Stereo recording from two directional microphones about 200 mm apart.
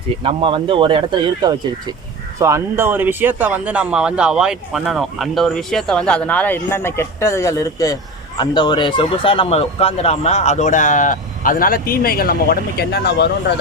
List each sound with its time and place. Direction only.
0.2 s speech: 25° right (ahead or behind); by 13.3 s 55° left (ahead or behind)